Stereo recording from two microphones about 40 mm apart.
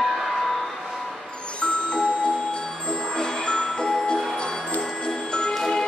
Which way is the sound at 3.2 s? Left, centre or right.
Left.